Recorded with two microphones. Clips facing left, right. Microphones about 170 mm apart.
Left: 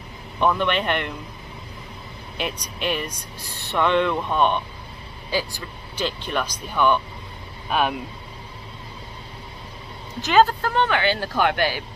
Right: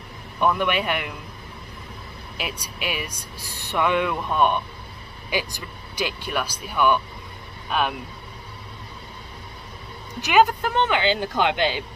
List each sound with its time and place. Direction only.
0.4 s speech: 10° right (ahead or behind)
2.3 s speech: 5° right (ahead or behind)
7.7 s speech: centre (ahead or behind)
10.2 s speech: 15° right (ahead or behind)